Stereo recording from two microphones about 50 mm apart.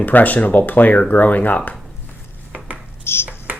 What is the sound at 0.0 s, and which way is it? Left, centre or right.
Speech, left.